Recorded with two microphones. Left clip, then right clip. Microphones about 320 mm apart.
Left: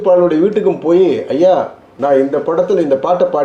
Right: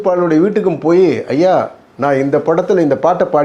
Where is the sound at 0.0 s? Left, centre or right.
Right.